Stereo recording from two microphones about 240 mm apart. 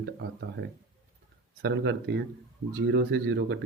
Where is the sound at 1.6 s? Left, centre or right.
Right.